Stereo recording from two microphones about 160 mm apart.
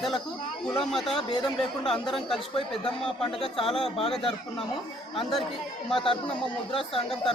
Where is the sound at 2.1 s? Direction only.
Centre (ahead or behind).